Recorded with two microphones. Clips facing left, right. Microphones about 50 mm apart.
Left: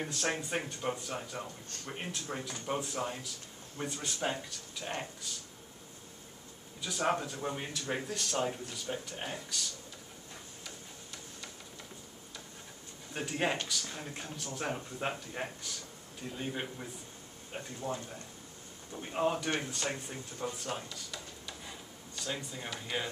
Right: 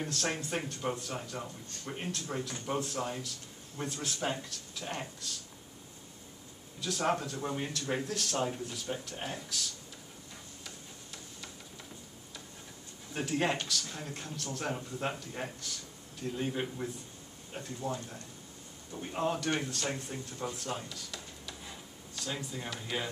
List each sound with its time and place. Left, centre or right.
0.0 s speech: centre
6.8 s speech: centre
10.6 s tick-tock: centre
13.1 s speech: centre
17.5 s speech: centre